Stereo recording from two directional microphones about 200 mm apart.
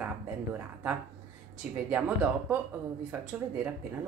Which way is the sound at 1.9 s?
5° right (ahead or behind).